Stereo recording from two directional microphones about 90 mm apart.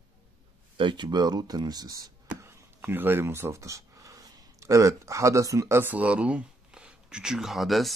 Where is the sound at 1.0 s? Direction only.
50° right (ahead or behind).